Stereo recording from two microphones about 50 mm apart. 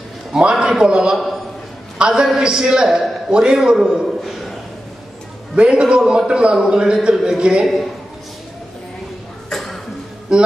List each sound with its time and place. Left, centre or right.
0.4 s speech: centre
1.1 s a man's voice: centre
2.0 s a man's voice: centre
3.3 s speech: centre
4.2 s a sound: centre
5.6 s a man's voice: centre
9.5 s cough: centre
10.3 s speech: centre